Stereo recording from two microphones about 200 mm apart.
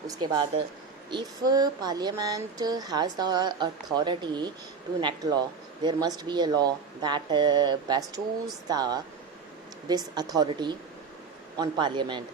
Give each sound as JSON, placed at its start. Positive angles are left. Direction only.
{"t": 0.1, "sound": "speech", "side_deg": -20}